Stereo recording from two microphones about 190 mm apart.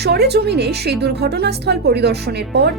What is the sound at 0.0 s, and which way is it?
A woman's voice, 60° right (ahead or behind).